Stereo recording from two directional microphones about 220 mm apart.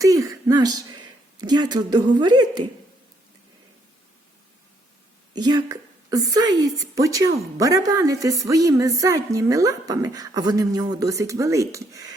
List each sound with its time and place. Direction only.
0.0 s a sound: 15° right (ahead or behind)
2.1 s speech: 20° right (ahead or behind)
5.3 s speech: 20° right (ahead or behind)